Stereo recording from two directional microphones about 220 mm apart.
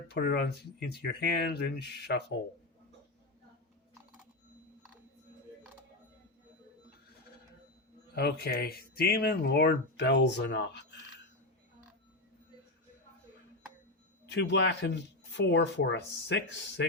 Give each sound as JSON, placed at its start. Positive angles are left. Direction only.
{"t": 0.1, "sound": "speech", "side_deg": 50}
{"t": 8.1, "sound": "speech", "side_deg": 50}
{"t": 14.3, "sound": "speech", "side_deg": 50}